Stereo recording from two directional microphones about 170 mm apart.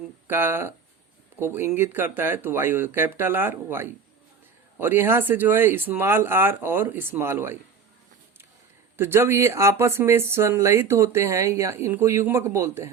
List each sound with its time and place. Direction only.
0.3 s speech: 15° right (ahead or behind)
9.0 s speech: 15° right (ahead or behind)